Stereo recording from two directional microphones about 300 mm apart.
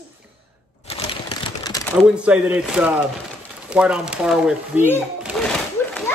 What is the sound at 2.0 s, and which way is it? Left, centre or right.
Speech, centre.